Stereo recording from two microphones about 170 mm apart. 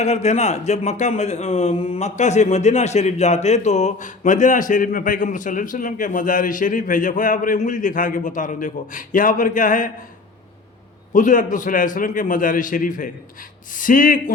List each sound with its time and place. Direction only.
0.0 s speech: 40° left (ahead or behind)
11.1 s speech: 50° left (ahead or behind)